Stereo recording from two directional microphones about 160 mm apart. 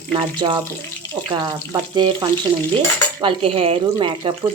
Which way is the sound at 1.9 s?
25° right (ahead or behind).